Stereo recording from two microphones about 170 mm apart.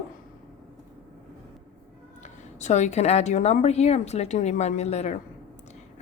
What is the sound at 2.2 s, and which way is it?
A woman's voice, 45° left (ahead or behind).